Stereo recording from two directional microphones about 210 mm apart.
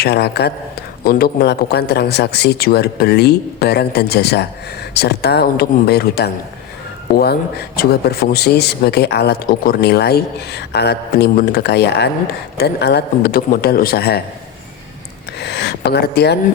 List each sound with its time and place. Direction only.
0.0 s speech: 50° left (ahead or behind)
15.4 s speech: 55° left (ahead or behind)